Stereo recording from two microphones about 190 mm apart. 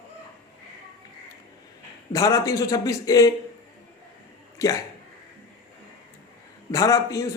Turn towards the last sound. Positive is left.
turn(degrees=15)  # may be behind; listen again after turning